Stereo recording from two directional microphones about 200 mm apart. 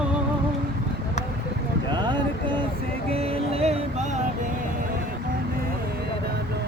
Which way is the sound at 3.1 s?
30° right (ahead or behind).